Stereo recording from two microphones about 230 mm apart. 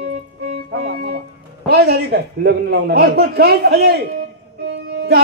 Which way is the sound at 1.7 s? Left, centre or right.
Right.